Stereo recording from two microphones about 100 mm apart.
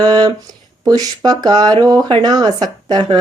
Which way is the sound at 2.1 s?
45° right (ahead or behind).